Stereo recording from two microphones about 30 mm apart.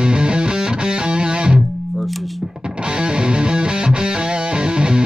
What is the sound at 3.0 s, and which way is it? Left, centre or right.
Music, right.